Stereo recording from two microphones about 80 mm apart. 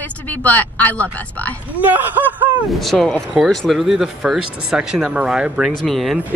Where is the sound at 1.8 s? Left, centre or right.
Right.